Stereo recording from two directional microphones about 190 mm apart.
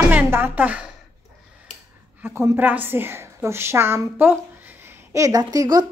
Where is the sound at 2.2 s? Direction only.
15° right (ahead or behind).